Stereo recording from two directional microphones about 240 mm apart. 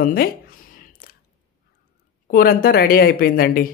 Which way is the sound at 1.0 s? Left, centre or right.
Left.